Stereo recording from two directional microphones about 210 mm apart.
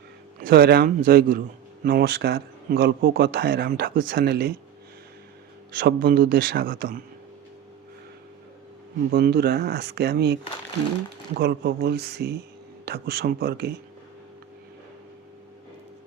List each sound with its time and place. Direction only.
0.4 s speech: 45° right (ahead or behind)
5.7 s speech: 45° right (ahead or behind)
9.1 s speech: 50° right (ahead or behind)
11.3 s speech: 50° right (ahead or behind)